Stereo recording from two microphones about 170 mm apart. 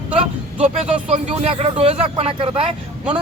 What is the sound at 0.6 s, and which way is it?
A man's voice, 40° right (ahead or behind).